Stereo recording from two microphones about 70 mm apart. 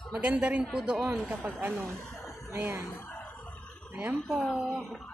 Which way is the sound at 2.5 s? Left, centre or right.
Right.